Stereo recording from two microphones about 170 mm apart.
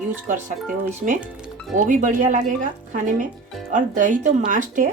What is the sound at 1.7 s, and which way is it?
Speech, 45° right (ahead or behind).